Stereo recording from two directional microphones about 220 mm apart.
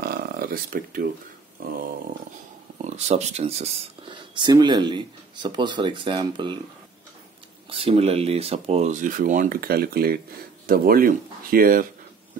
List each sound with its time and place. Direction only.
0.0 s a sound: 45° right (ahead or behind)
1.6 s speech: 40° right (ahead or behind)
2.8 s speech: 30° right (ahead or behind)
7.7 s speech: 25° right (ahead or behind)